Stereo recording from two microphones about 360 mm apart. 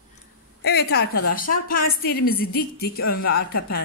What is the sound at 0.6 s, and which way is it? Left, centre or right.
A woman's voice, left.